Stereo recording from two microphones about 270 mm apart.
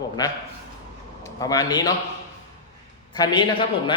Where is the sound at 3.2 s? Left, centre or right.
Centre.